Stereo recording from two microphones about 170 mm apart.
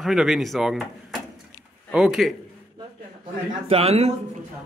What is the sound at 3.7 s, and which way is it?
Speech, 40° right (ahead or behind).